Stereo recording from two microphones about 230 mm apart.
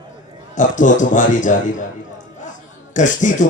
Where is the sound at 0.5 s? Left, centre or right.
Left.